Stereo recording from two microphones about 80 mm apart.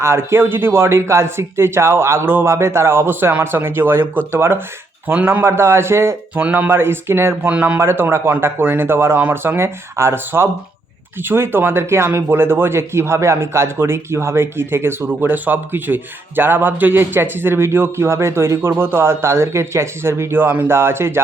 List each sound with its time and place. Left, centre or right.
0.0 s speech: right
6.3 s speech: right
7.5 s a man's voice: centre
7.8 s speech: right